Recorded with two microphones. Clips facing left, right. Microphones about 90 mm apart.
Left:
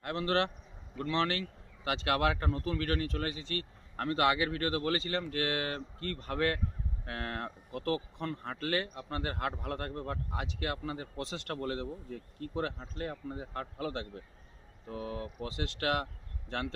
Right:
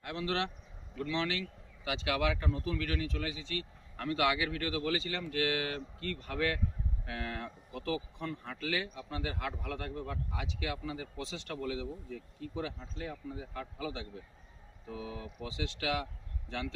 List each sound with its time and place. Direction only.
0.0 s a man's voice: 45° left (ahead or behind)